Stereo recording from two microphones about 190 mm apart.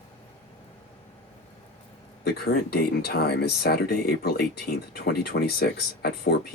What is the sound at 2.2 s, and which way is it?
Speech, 55° left (ahead or behind).